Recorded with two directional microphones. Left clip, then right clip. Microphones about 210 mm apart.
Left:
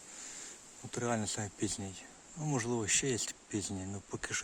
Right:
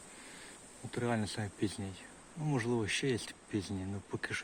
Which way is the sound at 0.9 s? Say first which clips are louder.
Even; 15° left (ahead or behind).